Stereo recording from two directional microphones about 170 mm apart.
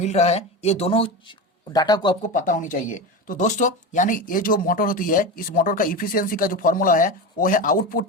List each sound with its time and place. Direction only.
0.0 s speech: 40° left (ahead or behind)
2.2 s speech: 50° left (ahead or behind)